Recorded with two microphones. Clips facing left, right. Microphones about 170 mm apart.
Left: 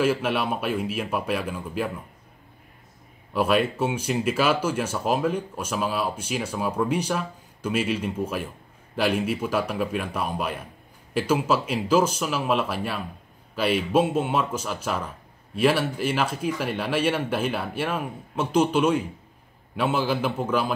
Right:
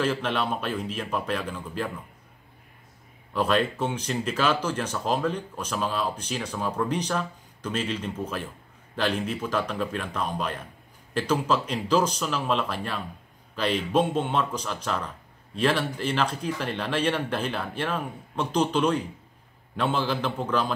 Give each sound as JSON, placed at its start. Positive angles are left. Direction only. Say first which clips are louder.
{"t": 0.0, "sound": "speech", "louder": "left 3 dB", "side_deg": 10}
{"t": 3.3, "sound": "speech", "louder": "left 2 dB", "side_deg": 10}